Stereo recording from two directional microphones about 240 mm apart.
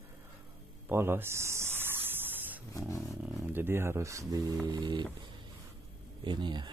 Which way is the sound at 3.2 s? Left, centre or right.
Centre.